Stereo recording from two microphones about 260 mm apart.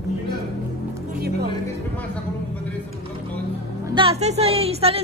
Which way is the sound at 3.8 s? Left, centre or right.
Centre.